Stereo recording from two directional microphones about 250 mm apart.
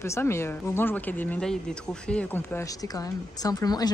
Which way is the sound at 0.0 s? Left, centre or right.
Centre.